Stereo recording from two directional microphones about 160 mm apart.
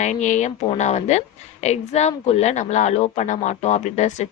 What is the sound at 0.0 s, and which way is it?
A woman's voice, 50° left (ahead or behind).